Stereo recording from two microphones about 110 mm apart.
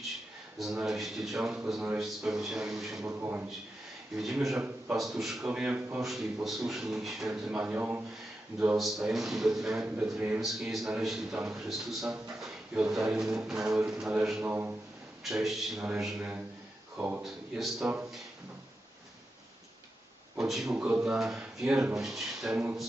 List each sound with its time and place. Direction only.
0.6 s a man's voice: 5° right (ahead or behind)
3.0 s a man's voice: 20° right (ahead or behind)
4.2 s a man's voice: centre (ahead or behind)
8.7 s a man's voice: centre (ahead or behind)
10.4 s a man's voice: centre (ahead or behind)
15.2 s a man's voice: 5° right (ahead or behind)
17.2 s a man's voice: 5° right (ahead or behind)
20.4 s a man's voice: 5° right (ahead or behind)